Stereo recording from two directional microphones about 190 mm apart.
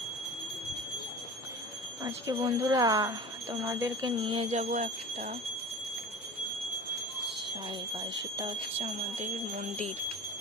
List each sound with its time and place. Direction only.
2.0 s speech: 20° right (ahead or behind)
4.2 s speech: 25° right (ahead or behind)
4.5 s speech: 40° right (ahead or behind)
8.4 s speech: 25° right (ahead or behind)
9.0 s speech: 40° right (ahead or behind)